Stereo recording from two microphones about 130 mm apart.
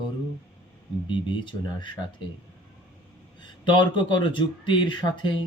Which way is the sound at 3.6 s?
35° left (ahead or behind).